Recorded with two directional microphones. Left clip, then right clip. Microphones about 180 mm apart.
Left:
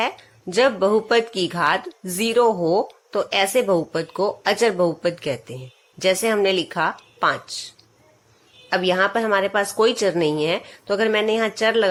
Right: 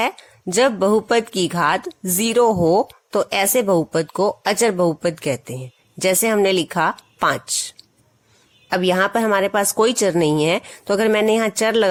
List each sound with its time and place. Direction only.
0.0 s speech: 40° right (ahead or behind)